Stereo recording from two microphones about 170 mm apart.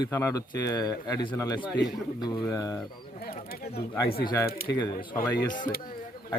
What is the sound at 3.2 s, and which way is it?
Speech, 60° left (ahead or behind).